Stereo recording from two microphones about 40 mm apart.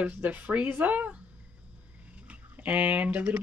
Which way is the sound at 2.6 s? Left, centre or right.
Right.